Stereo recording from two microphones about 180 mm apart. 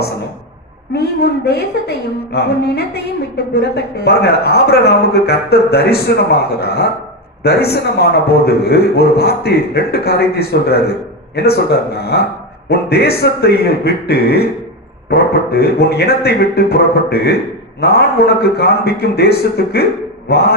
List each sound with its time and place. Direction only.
0.9 s a woman's voice: 60° left (ahead or behind)